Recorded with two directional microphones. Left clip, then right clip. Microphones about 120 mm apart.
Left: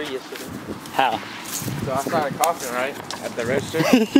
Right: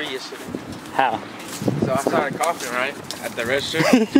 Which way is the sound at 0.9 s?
15° left (ahead or behind).